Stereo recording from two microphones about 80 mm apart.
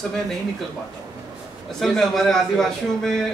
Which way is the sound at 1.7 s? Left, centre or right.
Centre.